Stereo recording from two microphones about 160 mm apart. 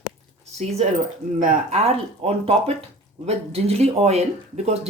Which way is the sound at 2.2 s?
40° right (ahead or behind).